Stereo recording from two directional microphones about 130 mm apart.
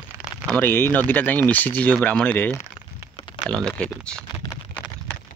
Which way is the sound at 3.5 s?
5° left (ahead or behind).